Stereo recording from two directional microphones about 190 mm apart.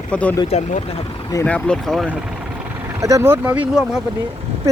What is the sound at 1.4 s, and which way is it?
Speech, 5° left (ahead or behind).